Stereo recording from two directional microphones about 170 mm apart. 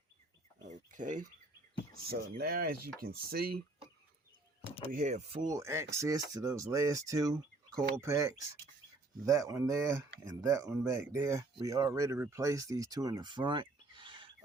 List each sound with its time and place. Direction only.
0.7 s bird: 50° right (ahead or behind)
1.9 s speech: 65° right (ahead or behind)
4.9 s speech: 45° right (ahead or behind)
5.5 s speech: 20° right (ahead or behind)